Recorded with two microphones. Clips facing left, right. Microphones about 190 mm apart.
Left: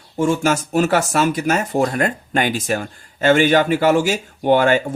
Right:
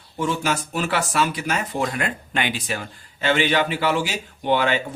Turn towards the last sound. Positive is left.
turn(degrees=45)  # may be behind; listen again after turning